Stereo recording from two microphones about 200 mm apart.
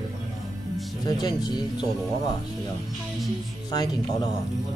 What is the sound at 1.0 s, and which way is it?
Speech, 20° left (ahead or behind).